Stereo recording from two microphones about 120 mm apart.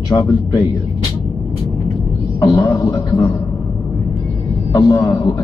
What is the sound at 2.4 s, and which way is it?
A man's voice, 30° left (ahead or behind).